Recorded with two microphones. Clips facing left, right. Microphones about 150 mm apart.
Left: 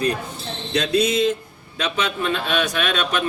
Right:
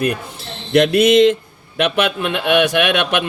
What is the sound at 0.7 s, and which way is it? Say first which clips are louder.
Speech: right 8 dB; 90° right.